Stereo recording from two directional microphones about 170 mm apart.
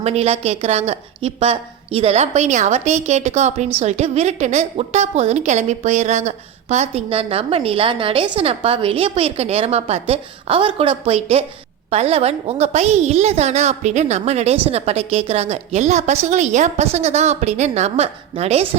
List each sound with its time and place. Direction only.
0.0 s a woman's voice: 40° right (ahead or behind)